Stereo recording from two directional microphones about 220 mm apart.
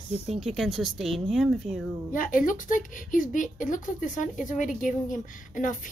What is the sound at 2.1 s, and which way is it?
Speech, 40° left (ahead or behind).